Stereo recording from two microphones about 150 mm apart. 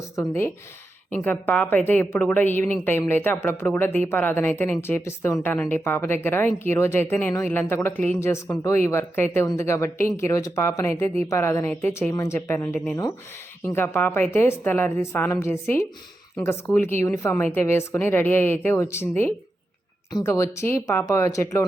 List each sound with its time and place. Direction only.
0.2 s speech: 15° left (ahead or behind)